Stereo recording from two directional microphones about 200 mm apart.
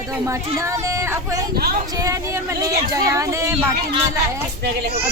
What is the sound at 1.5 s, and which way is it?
Speech, 50° right (ahead or behind).